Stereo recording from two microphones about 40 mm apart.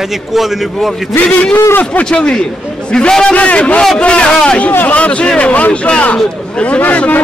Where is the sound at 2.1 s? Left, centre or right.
Left.